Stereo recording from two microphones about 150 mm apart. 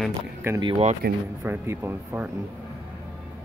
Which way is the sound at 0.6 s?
35° right (ahead or behind).